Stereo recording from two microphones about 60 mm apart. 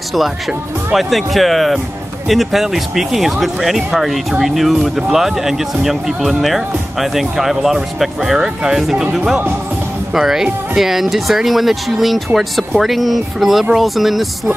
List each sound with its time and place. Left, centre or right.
0.9 s speech: centre